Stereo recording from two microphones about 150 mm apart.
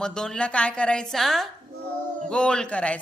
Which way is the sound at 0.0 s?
5° left (ahead or behind).